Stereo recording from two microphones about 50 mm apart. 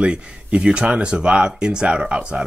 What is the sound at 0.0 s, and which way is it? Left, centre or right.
Speech, right.